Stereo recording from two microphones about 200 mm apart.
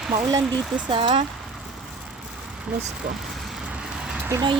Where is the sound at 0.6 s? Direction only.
5° right (ahead or behind).